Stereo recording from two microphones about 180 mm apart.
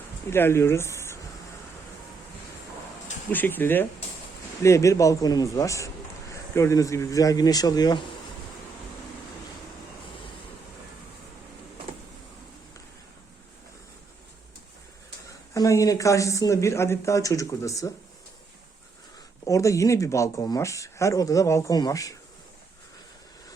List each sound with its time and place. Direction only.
0.3 s speech: 15° left (ahead or behind)
3.3 s speech: 10° left (ahead or behind)
15.5 s speech: 20° left (ahead or behind)
19.5 s speech: 15° left (ahead or behind)